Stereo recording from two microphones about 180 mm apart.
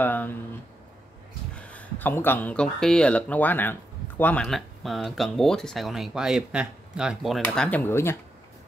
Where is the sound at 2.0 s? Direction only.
10° left (ahead or behind).